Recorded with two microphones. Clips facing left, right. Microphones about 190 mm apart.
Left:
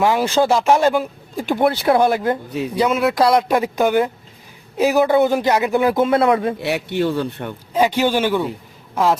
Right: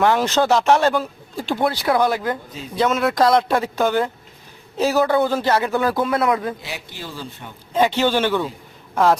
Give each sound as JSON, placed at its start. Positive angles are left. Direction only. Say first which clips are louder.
{"t": 0.0, "sound": "speech", "louder": "left 1 dB", "side_deg": 5}
{"t": 2.5, "sound": "speech", "louder": "left 11 dB", "side_deg": 65}
{"t": 2.7, "sound": "speech", "louder": "left 1 dB", "side_deg": 10}
{"t": 6.6, "sound": "speech", "louder": "left 14 dB", "side_deg": 65}
{"t": 7.7, "sound": "speech", "louder": "left 1 dB", "side_deg": 10}